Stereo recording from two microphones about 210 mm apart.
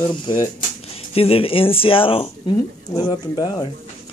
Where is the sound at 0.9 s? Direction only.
30° left (ahead or behind).